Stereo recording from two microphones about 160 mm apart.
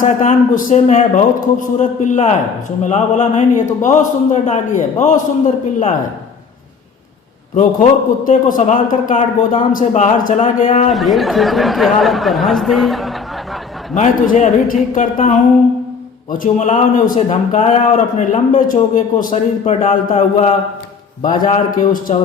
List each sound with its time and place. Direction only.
0.0 s speech: 50° left (ahead or behind)
7.5 s speech: 50° left (ahead or behind)
10.9 s speech: centre (ahead or behind)
13.9 s speech: 50° left (ahead or behind)
16.4 s speech: 50° left (ahead or behind)
21.2 s a man's voice: 55° left (ahead or behind)